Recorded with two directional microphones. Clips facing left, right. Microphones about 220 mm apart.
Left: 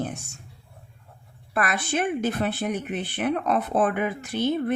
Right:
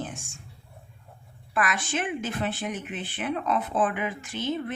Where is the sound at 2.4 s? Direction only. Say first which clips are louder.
Left 3 dB; 50° left (ahead or behind).